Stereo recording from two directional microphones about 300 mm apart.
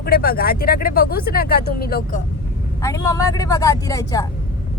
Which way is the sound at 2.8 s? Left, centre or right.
Centre.